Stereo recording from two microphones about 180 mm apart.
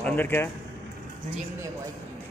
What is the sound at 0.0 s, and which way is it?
Speech, 10° left (ahead or behind).